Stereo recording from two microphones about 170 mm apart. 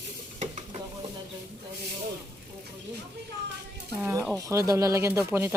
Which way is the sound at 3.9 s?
10° right (ahead or behind).